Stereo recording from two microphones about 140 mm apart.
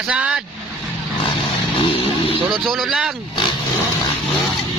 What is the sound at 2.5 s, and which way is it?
Speech, centre (ahead or behind).